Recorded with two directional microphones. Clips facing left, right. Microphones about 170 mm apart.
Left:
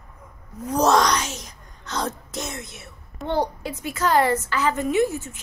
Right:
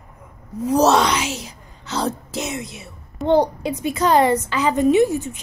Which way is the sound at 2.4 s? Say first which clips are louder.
Right 4 dB; 10° right (ahead or behind).